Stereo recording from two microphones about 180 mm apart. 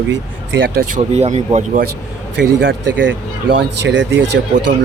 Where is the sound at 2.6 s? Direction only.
90° right.